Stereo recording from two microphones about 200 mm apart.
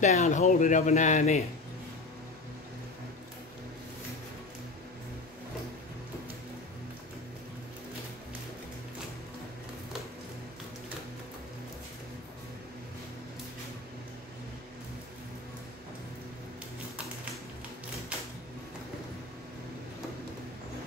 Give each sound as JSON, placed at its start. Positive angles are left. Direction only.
{"t": 0.0, "sound": "speech", "side_deg": 35}